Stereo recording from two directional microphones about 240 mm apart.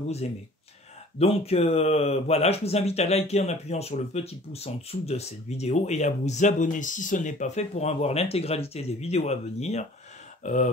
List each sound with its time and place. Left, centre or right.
1.2 s speech: left